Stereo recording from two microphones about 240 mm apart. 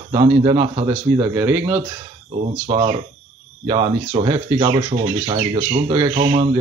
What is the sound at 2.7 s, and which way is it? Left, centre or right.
Speech, right.